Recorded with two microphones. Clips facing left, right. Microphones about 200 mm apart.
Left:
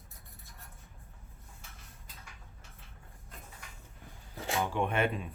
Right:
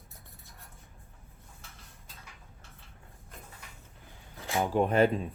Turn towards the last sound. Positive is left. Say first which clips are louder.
# right 6 dB
turn(degrees=-35)  # may be behind; listen again after turning